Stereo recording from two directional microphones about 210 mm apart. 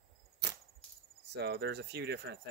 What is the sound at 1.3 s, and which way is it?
Speech, 50° right (ahead or behind).